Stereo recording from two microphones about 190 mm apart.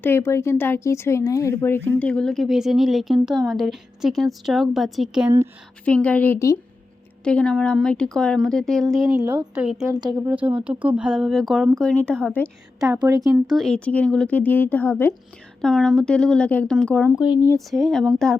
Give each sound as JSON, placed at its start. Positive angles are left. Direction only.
{"t": 0.0, "sound": "speech", "side_deg": 10}
{"t": 9.2, "sound": "a woman's voice", "side_deg": -20}
{"t": 9.6, "sound": "speech", "side_deg": 0}
{"t": 9.9, "sound": "a woman's voice", "side_deg": -20}
{"t": 10.2, "sound": "speech", "side_deg": -10}
{"t": 13.0, "sound": "a woman's voice", "side_deg": -20}
{"t": 13.5, "sound": "speech", "side_deg": 0}
{"t": 17.2, "sound": "speech", "side_deg": 20}
{"t": 17.7, "sound": "speech", "side_deg": 0}